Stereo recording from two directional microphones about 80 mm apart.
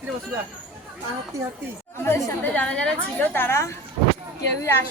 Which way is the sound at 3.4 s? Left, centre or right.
Left.